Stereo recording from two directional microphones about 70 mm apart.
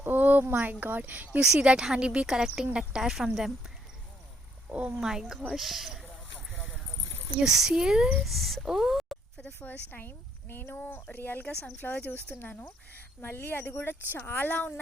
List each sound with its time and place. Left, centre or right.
0.0 s speech: right
1.5 s speech: centre
4.7 s speech: centre
7.3 s speech: centre
8.2 s speech: centre
9.5 s speech: left